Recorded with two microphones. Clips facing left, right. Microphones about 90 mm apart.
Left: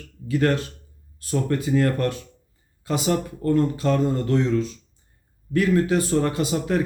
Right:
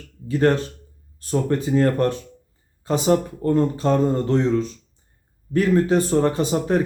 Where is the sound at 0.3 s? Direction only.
30° right (ahead or behind).